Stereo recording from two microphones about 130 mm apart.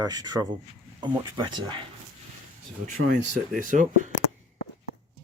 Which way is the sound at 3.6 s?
80° right.